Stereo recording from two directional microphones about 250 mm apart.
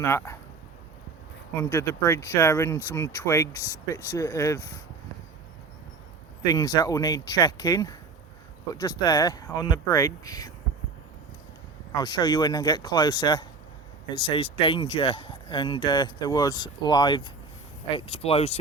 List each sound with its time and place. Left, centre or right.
0.0 s speech: centre
1.5 s speech: centre
6.4 s speech: centre
11.9 s speech: centre